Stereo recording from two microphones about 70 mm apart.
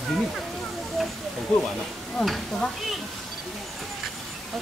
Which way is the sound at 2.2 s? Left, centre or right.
Centre.